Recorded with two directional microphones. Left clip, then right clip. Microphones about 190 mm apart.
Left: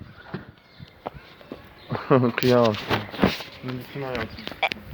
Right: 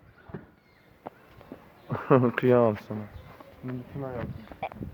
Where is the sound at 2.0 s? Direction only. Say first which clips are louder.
Left 2 dB; 35° right (ahead or behind).